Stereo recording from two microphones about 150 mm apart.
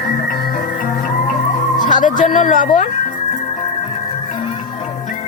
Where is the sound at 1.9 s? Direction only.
60° left (ahead or behind).